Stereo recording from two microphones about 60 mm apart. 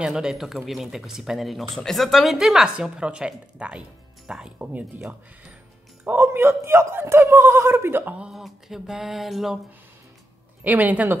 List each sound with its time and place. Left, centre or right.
0.0 s speech: centre
1.9 s a sound: centre
2.3 s speech: centre
6.0 s a man's voice: right
8.0 s speech: right
8.3 s a sound: centre
10.6 s speech: right